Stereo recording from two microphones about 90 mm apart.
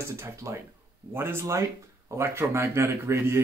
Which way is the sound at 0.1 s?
35° right (ahead or behind).